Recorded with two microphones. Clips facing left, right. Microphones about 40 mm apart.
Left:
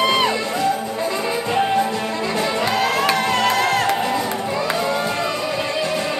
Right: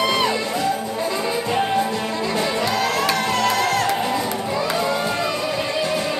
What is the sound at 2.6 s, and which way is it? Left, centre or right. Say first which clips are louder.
Music: left 2 dB; left.